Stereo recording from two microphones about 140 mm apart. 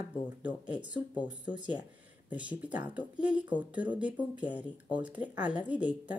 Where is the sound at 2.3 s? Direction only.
10° right (ahead or behind).